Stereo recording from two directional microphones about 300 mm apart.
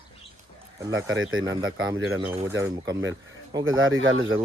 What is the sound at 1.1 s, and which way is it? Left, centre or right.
Speech, right.